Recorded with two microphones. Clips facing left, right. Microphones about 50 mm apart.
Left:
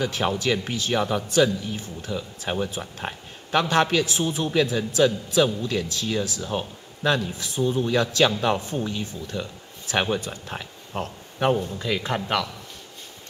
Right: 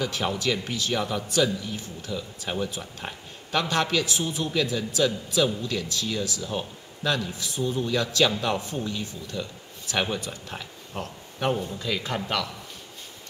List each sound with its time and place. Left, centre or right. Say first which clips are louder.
0.0 s a man's voice: left 3 dB; left